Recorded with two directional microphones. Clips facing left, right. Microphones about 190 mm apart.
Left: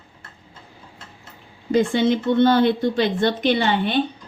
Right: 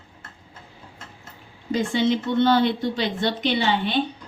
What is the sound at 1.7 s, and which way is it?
Speech, 55° left (ahead or behind).